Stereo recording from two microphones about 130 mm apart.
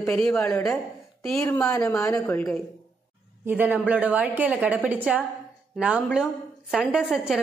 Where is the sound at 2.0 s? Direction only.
10° left (ahead or behind).